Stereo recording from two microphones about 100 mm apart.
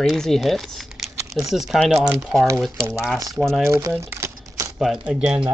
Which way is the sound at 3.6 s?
25° right (ahead or behind).